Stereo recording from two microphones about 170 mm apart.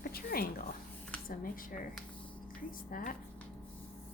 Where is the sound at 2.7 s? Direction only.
55° left (ahead or behind).